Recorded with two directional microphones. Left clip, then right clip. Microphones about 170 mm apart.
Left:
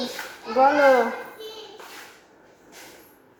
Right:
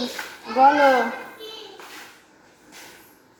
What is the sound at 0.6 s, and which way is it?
Speech, 20° left (ahead or behind).